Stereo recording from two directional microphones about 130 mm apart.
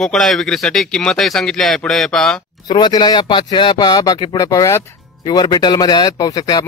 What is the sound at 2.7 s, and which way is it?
Speech, 35° left (ahead or behind).